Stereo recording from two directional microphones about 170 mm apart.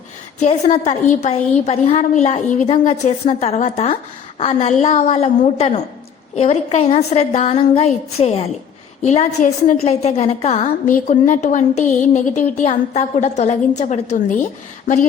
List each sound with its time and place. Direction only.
0.3 s a woman's voice: 45° left (ahead or behind)